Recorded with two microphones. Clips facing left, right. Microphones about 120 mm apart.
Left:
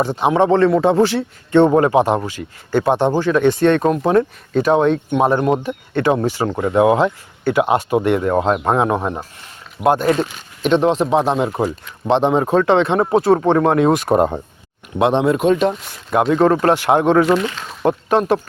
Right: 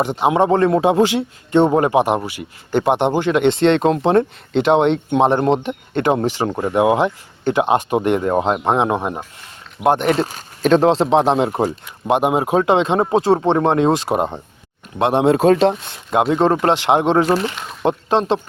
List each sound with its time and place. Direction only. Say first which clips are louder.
0.0 s speech: even; 15° right (ahead or behind)
10.2 s speech: right 2 dB; 40° right (ahead or behind)
12.0 s speech: left 1 dB; 10° right (ahead or behind); by 14.1 s 25° right (ahead or behind)
15.2 s speech: right 2 dB; 30° right (ahead or behind)
17.2 s speech: left 1 dB; 35° right (ahead or behind)
17.8 s speech: left 1 dB; 25° right (ahead or behind)